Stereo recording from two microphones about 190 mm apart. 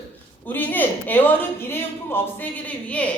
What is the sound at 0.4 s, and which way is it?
A woman's voice, 10° left (ahead or behind).